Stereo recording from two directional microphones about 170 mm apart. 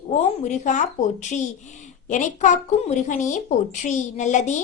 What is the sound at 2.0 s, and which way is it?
A woman's voice, 50° left (ahead or behind).